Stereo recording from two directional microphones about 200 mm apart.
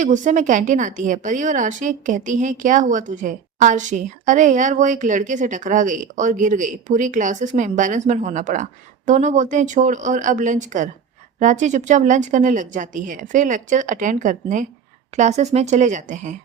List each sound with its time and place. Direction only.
0.0 s a woman's voice: 40° right (ahead or behind)